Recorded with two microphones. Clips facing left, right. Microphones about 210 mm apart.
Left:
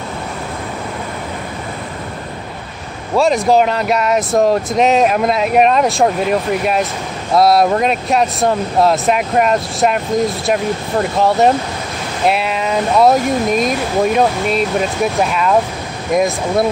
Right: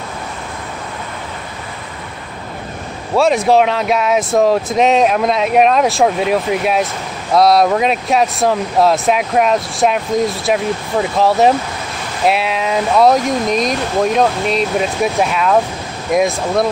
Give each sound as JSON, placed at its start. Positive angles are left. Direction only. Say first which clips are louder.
{"t": 3.2, "sound": "speech", "louder": "even", "side_deg": 0}